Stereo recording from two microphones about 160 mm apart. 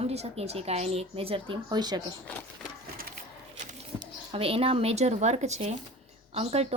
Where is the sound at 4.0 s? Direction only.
35° right (ahead or behind).